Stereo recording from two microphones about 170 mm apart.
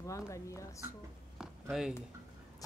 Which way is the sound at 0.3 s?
20° left (ahead or behind).